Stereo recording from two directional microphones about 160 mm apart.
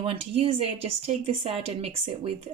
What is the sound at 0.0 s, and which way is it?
A woman's voice, 35° right (ahead or behind).